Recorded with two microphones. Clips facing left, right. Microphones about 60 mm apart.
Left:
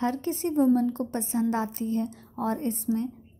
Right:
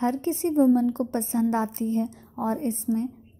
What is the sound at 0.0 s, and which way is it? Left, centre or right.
A woman's voice, right.